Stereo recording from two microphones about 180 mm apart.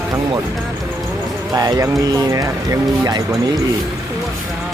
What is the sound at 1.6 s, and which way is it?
Speech, 20° right (ahead or behind).